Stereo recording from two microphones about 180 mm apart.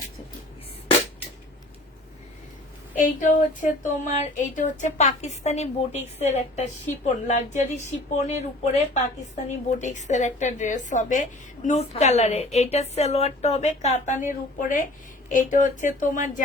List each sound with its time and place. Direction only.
2.9 s speech: 45° left (ahead or behind)